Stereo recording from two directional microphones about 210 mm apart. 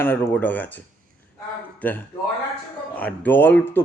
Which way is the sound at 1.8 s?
5° left (ahead or behind).